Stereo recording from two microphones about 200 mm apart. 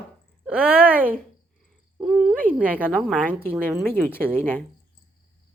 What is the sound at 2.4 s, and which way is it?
A man's voice, 10° right (ahead or behind).